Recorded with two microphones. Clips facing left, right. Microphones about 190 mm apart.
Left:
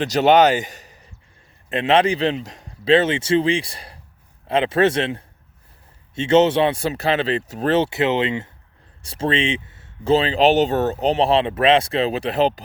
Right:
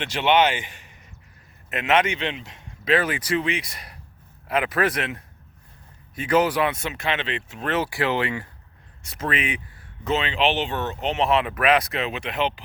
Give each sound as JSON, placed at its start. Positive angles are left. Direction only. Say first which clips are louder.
{"t": 0.0, "sound": "a man's voice", "louder": "left 6 dB", "side_deg": 40}